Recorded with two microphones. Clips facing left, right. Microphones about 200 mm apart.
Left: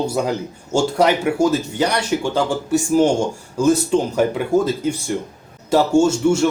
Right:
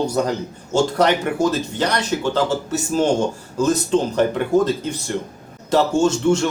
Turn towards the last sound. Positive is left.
turn(degrees=10)  # may be behind; listen again after turning